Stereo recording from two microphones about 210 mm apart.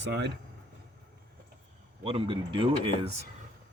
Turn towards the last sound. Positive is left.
turn(degrees=-25)  # may be behind; listen again after turning